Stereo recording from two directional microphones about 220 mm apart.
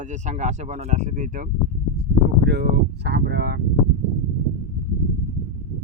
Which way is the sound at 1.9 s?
50° right (ahead or behind).